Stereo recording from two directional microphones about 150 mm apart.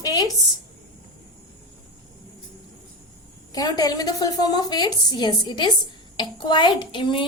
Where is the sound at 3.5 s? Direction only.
25° left (ahead or behind).